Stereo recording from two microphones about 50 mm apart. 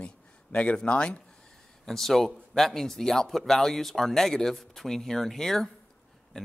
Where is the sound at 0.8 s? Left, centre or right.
Left.